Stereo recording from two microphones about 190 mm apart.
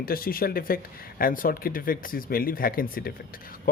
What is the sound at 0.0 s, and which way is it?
Speech, 50° left (ahead or behind).